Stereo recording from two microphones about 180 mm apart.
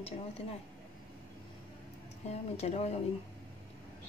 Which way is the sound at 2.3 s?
35° left (ahead or behind).